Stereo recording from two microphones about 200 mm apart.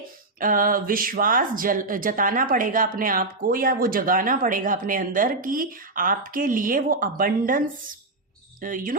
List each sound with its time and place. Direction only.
0.3 s speech: 45° right (ahead or behind)
8.6 s speech: 45° right (ahead or behind)